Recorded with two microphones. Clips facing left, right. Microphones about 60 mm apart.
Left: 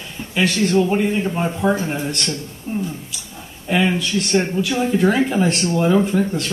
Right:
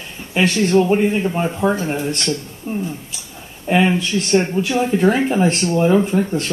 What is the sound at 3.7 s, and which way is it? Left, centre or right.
Speech, right.